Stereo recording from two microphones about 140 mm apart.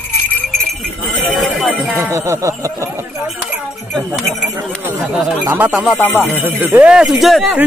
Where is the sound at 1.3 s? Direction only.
Centre (ahead or behind).